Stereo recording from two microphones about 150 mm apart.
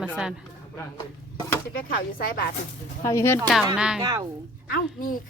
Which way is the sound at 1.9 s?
75° left (ahead or behind).